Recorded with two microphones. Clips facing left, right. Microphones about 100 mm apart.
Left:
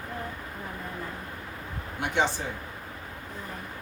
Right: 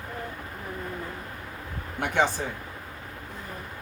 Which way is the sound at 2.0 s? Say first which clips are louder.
Right 2 dB; 50° right (ahead or behind).